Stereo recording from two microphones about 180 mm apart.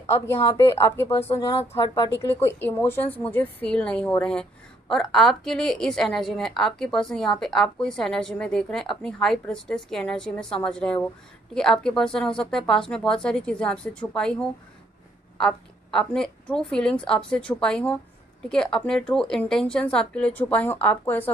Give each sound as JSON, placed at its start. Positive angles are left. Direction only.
{"t": 0.6, "sound": "a woman's voice", "side_deg": 15}